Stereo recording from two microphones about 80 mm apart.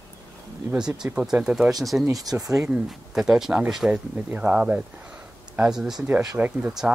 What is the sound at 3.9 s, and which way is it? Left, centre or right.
Speech, centre.